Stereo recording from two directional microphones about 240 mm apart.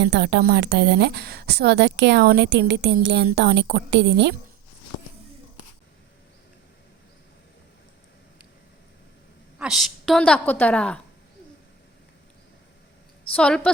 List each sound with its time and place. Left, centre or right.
0.0 s a woman's voice: right
9.6 s a woman's voice: centre
13.3 s a woman's voice: centre